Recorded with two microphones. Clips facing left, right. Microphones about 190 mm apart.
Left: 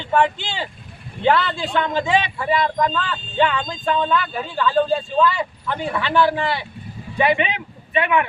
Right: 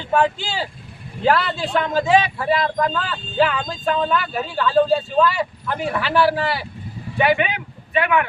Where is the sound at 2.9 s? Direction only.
5° right (ahead or behind).